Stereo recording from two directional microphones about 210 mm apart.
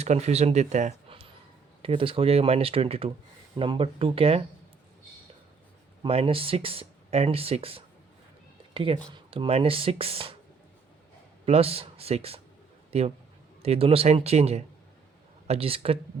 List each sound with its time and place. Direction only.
0.0 s speech: 30° right (ahead or behind)
6.0 s speech: 25° right (ahead or behind)
11.4 s a man's voice: 30° right (ahead or behind)